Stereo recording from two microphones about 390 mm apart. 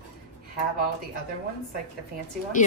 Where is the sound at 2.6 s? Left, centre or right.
Centre.